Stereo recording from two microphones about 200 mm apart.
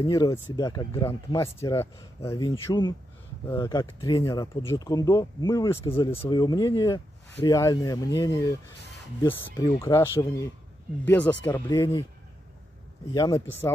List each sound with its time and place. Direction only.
0.0 s speech: 15° left (ahead or behind)
13.1 s speech: 15° left (ahead or behind)